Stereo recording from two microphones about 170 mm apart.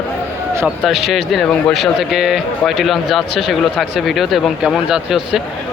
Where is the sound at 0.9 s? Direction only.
Centre (ahead or behind).